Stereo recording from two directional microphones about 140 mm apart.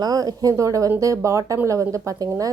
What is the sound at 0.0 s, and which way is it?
A woman's voice, 30° right (ahead or behind).